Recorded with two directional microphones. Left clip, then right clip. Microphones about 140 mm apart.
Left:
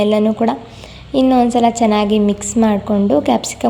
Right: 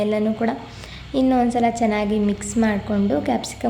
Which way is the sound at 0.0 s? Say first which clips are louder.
Left 7 dB; 35° left (ahead or behind).